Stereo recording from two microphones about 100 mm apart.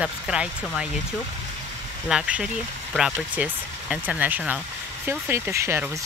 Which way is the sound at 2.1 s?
5° right (ahead or behind).